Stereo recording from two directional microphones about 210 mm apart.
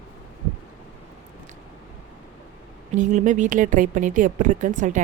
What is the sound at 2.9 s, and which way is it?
Speech, 35° right (ahead or behind).